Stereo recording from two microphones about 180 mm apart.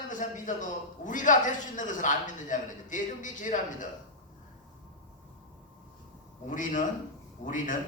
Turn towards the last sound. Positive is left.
turn(degrees=45)  # may be behind; listen again after turning